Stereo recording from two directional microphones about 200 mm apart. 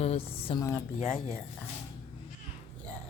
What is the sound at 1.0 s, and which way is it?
Speech, 40° left (ahead or behind).